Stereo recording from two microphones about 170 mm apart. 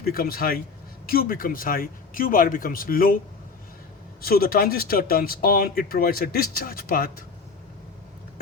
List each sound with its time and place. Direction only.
0.0 s speech: 60° left (ahead or behind)
4.2 s speech: 60° left (ahead or behind)